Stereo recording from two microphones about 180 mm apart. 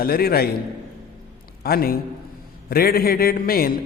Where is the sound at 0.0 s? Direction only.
55° left (ahead or behind).